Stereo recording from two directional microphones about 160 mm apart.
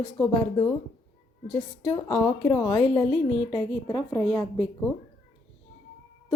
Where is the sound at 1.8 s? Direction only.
25° left (ahead or behind).